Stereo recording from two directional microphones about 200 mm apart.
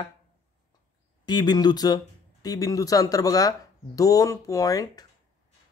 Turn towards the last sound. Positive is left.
turn(degrees=15)  # may be behind; listen again after turning